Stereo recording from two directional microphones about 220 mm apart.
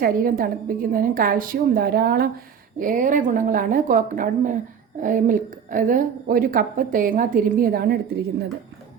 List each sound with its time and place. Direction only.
0.0 s a woman's voice: 40° right (ahead or behind)